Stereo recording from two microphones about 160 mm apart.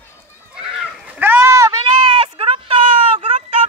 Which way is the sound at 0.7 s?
5° right (ahead or behind).